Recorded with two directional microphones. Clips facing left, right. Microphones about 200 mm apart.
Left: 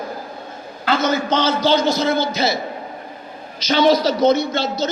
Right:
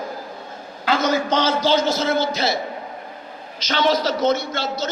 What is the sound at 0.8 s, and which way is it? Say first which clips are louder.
A man's voice: left 1 dB; 10° right (ahead or behind).